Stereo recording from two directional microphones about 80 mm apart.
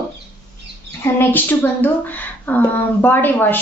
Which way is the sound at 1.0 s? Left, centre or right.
Left.